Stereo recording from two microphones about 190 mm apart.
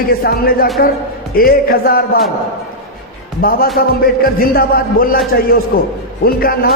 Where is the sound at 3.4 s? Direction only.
50° left (ahead or behind).